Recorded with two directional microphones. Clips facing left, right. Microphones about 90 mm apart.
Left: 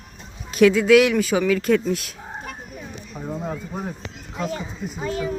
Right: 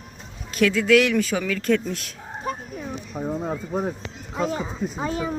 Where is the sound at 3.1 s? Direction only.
15° right (ahead or behind).